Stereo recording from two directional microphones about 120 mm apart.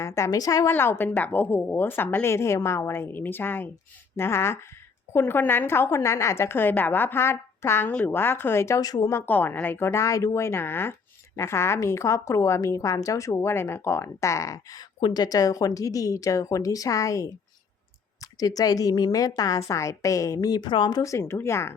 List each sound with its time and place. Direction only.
0.0 s a woman's voice: 25° left (ahead or behind)
0.7 s a woman's voice: 20° left (ahead or behind); by 21.0 s 40° left (ahead or behind)
21.0 s a woman's voice: 25° left (ahead or behind)